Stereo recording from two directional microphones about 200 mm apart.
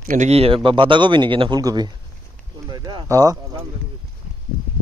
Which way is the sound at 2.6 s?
20° right (ahead or behind).